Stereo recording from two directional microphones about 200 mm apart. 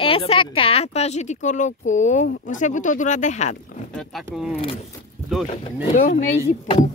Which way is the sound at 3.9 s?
Centre (ahead or behind).